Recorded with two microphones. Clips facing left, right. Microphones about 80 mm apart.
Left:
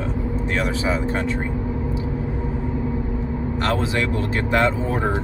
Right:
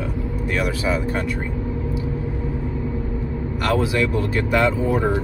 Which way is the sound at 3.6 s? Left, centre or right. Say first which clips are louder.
Right 3 dB; left.